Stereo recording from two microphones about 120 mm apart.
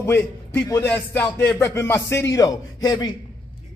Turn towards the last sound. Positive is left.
turn(degrees=35)  # may be behind; listen again after turning